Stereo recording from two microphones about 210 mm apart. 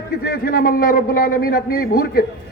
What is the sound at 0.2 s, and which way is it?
A man's voice, 45° left (ahead or behind).